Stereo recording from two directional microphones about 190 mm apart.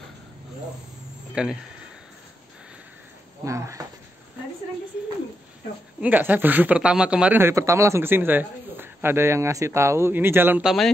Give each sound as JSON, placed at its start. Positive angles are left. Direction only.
{"t": 1.3, "sound": "speech", "side_deg": -5}
{"t": 3.4, "sound": "speech", "side_deg": -15}
{"t": 5.9, "sound": "speech", "side_deg": -10}